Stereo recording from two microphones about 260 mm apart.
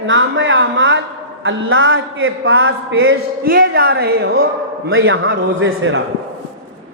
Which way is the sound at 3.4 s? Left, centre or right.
Right.